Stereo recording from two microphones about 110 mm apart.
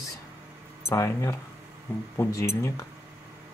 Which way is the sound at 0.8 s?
25° left (ahead or behind).